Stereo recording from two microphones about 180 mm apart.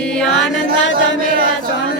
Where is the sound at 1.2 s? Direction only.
50° right (ahead or behind).